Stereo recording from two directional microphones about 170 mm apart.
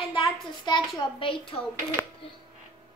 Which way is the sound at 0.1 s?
30° left (ahead or behind).